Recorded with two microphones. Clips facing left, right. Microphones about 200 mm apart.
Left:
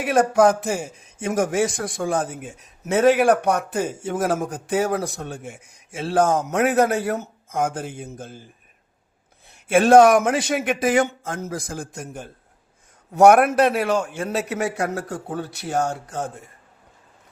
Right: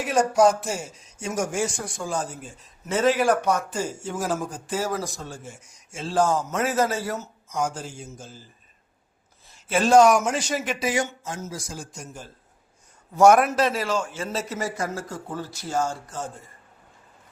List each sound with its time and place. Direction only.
0.0 s a man's voice: 55° left (ahead or behind)
9.5 s a man's voice: 55° left (ahead or behind)